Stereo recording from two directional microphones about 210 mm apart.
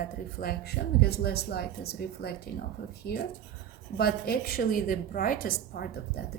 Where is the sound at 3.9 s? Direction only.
45° left (ahead or behind).